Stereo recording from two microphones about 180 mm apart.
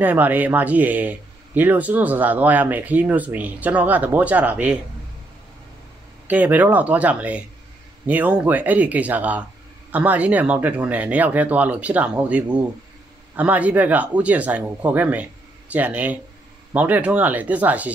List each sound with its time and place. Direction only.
0.0 s speech: 10° right (ahead or behind)
6.2 s speech: 10° right (ahead or behind)